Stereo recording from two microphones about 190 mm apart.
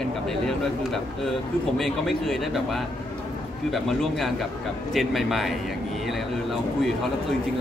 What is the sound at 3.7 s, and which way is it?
A man's voice, centre (ahead or behind).